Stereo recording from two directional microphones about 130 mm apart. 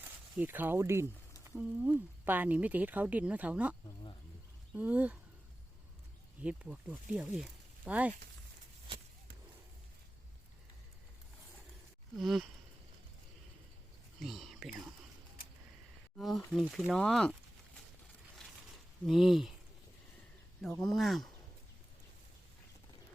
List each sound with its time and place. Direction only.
0.3 s speech: 15° right (ahead or behind)
6.4 s speech: 10° right (ahead or behind)
12.1 s speech: centre (ahead or behind)
14.2 s speech: centre (ahead or behind)
16.1 s speech: centre (ahead or behind)
18.4 s a sound: 5° left (ahead or behind)
19.0 s speech: centre (ahead or behind)
20.8 s speech: centre (ahead or behind)